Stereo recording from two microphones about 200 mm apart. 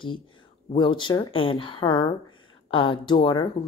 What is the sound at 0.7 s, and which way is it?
A woman's voice, 25° left (ahead or behind).